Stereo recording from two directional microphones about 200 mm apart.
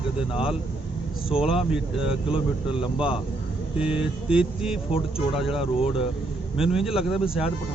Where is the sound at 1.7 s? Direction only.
5° right (ahead or behind).